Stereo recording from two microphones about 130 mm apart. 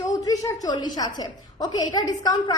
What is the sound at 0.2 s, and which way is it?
A woman's voice, 25° left (ahead or behind).